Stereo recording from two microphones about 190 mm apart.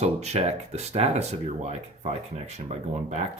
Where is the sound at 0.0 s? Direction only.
35° right (ahead or behind).